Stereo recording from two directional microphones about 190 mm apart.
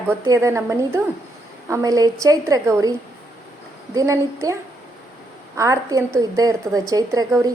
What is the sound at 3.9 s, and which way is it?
A woman's voice, 20° right (ahead or behind).